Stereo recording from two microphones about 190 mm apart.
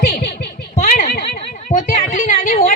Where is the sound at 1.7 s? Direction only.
40° left (ahead or behind).